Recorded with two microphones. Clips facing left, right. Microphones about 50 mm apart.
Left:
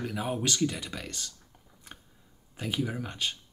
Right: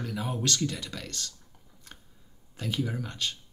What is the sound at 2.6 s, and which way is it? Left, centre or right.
Speech, centre.